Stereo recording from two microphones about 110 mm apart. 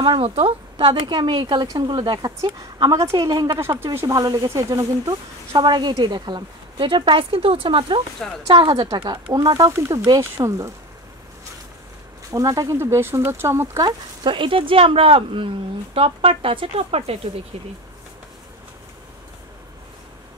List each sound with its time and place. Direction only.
0.0 s a woman's voice: 50° right (ahead or behind)
1.7 s speech: 35° right (ahead or behind)
3.5 s speech: 25° right (ahead or behind)
4.1 s speech: 35° right (ahead or behind)
5.5 s a woman's voice: 45° right (ahead or behind); by 10.7 s 30° right (ahead or behind)
12.3 s speech: 30° right (ahead or behind)
13.8 s speech: 45° right (ahead or behind); by 17.3 s 65° right (ahead or behind)